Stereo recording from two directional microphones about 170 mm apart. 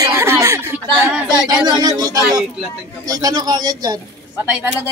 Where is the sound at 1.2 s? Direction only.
25° right (ahead or behind).